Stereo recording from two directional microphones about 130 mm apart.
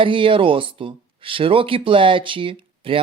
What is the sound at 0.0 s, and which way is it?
Speech, 40° right (ahead or behind).